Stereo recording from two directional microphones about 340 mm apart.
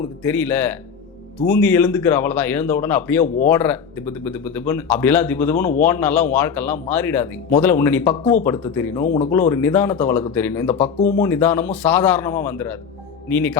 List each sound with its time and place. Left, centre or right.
0.2 s a man's voice: centre
9.0 s speech: centre
9.3 s a man's voice: centre